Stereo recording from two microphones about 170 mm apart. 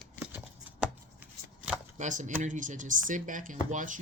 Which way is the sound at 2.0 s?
45° right (ahead or behind).